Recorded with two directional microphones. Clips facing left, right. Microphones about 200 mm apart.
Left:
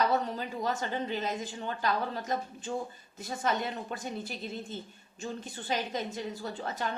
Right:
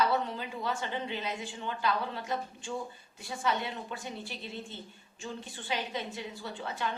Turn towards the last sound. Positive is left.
turn(degrees=40)  # may be behind; listen again after turning